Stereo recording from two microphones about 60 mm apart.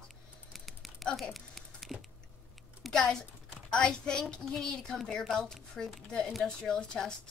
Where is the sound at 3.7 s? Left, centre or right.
Centre.